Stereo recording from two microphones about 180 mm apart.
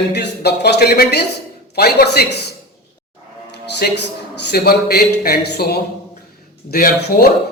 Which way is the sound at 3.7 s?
70° left (ahead or behind).